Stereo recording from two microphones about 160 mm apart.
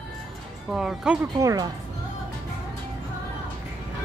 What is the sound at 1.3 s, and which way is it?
Speech, 20° right (ahead or behind).